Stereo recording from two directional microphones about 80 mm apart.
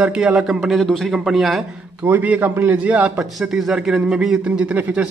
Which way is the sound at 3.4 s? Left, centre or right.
Centre.